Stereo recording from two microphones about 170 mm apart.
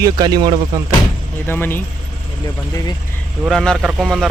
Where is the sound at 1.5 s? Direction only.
10° left (ahead or behind).